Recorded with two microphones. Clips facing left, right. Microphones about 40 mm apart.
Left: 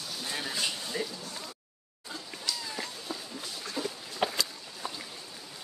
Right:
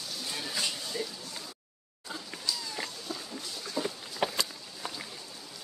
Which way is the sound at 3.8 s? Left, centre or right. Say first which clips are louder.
Right 2 dB; left.